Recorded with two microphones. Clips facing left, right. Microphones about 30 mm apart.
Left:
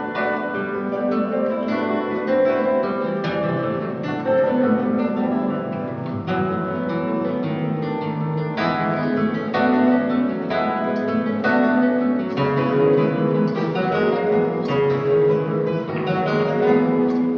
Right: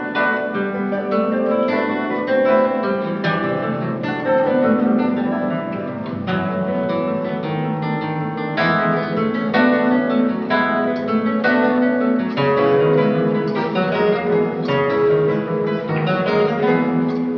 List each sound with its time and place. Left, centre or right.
1.1 s music: right
4.3 s music: right
8.5 s music: right
11.1 s music: right
16.1 s music: right